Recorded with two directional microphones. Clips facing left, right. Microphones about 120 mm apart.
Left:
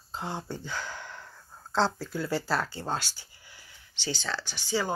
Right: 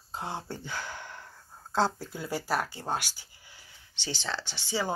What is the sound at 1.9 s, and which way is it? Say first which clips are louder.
Speech: left 4 dB; 20° right (ahead or behind).